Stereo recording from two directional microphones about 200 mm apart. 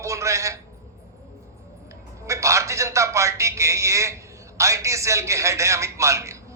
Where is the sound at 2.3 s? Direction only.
15° right (ahead or behind).